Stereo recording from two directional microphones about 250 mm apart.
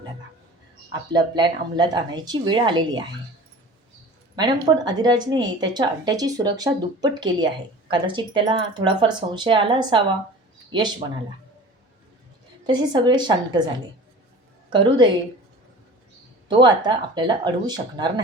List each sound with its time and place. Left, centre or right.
1.1 s a woman's voice: centre
4.4 s a woman's voice: centre
12.6 s a woman's voice: centre
14.7 s a woman's voice: centre
16.5 s a woman's voice: centre